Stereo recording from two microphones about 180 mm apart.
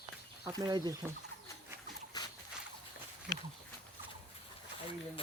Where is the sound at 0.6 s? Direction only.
20° right (ahead or behind).